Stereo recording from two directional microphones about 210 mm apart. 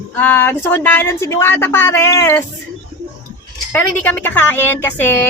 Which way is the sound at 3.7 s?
10° left (ahead or behind).